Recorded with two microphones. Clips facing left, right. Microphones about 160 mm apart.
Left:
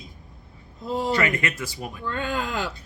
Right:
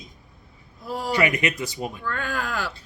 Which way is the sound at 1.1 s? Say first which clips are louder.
Right 2 dB; 15° right (ahead or behind).